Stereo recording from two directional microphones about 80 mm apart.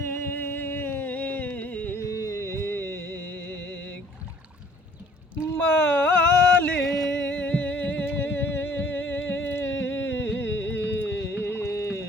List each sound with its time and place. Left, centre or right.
0.0 s music: left
2.0 s music: left
5.5 s a sound: left
6.8 s music: centre
7.3 s music: centre; by 12.0 s left